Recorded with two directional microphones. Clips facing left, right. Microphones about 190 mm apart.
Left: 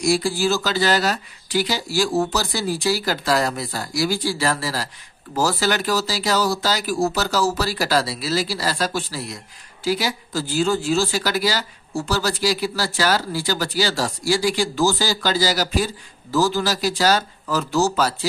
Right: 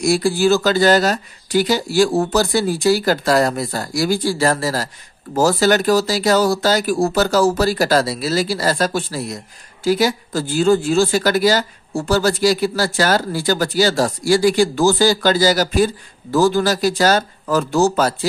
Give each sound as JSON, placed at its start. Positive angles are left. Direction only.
{"t": 0.0, "sound": "speech", "side_deg": -55}